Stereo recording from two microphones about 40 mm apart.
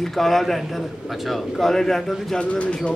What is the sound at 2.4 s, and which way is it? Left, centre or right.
Speech, left.